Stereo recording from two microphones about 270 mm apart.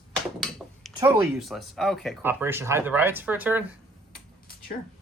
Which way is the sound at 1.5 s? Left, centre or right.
Centre.